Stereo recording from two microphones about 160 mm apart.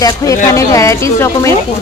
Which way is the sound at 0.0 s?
20° left (ahead or behind).